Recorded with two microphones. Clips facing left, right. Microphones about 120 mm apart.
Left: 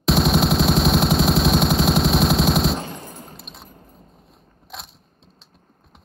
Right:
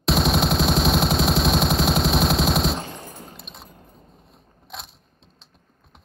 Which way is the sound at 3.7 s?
45° left (ahead or behind).